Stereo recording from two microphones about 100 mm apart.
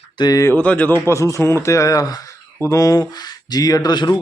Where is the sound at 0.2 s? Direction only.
40° left (ahead or behind).